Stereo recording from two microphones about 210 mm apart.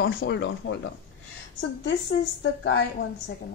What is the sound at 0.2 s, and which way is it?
Speech, 55° left (ahead or behind).